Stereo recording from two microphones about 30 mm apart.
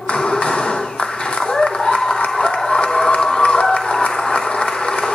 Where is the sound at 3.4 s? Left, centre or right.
Left.